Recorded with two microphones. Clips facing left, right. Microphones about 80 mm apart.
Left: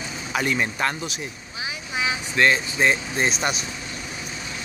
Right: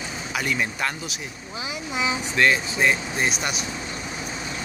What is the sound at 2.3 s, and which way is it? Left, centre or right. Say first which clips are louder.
Speech: left 1 dB; centre.